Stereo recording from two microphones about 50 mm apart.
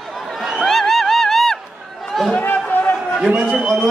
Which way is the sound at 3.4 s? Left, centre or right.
Centre.